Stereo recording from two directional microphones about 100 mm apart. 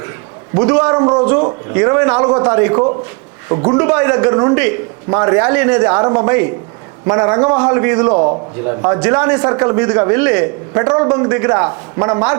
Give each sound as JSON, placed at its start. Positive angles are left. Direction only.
{"t": 0.5, "sound": "a man's voice", "side_deg": -20}
{"t": 0.9, "sound": "a man's voice", "side_deg": -30}